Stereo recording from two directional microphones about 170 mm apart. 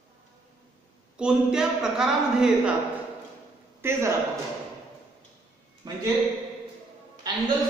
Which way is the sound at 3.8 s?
15° right (ahead or behind).